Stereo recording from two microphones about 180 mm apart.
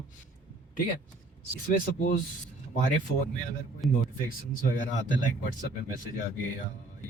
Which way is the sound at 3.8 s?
Centre (ahead or behind).